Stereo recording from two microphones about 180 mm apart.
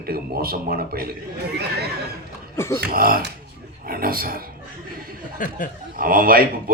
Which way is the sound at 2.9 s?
55° right (ahead or behind).